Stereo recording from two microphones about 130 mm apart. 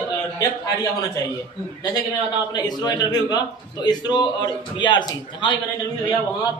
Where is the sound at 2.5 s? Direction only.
30° left (ahead or behind).